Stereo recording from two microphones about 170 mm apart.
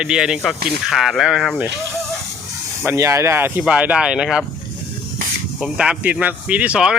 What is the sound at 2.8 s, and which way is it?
Speech, 15° right (ahead or behind).